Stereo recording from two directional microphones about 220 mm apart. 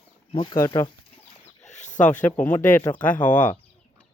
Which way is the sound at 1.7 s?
35° left (ahead or behind).